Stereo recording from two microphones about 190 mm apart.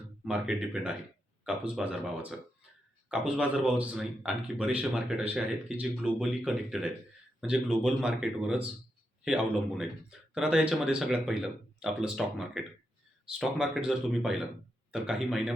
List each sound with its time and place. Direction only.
0.3 s speech: 5° right (ahead or behind)